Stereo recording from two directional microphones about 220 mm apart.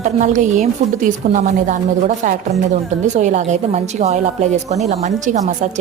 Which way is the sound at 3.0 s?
35° right (ahead or behind).